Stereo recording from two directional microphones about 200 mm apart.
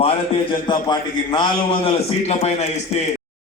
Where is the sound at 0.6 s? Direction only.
25° left (ahead or behind).